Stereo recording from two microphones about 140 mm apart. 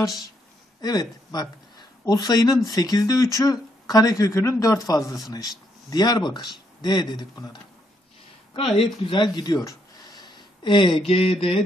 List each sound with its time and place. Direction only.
0.7 s speech: 30° left (ahead or behind)
8.5 s speech: 40° left (ahead or behind)